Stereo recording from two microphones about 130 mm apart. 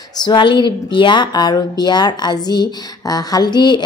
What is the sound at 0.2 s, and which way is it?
A woman's voice, 35° left (ahead or behind).